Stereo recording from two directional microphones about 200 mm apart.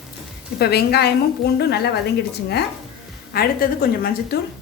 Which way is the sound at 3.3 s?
45° left (ahead or behind).